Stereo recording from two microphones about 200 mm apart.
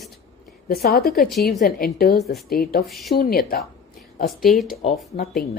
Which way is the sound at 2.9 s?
Centre (ahead or behind).